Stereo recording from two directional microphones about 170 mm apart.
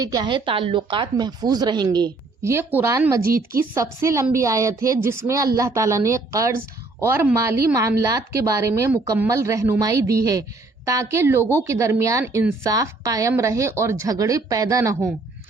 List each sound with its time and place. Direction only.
0.0 s speech: 25° right (ahead or behind)
3.2 s a woman's voice: 60° right (ahead or behind)
4.0 s a woman's voice: 15° right (ahead or behind)